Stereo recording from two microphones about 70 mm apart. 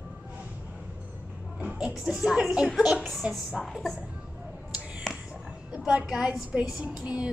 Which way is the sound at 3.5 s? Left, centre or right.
Centre.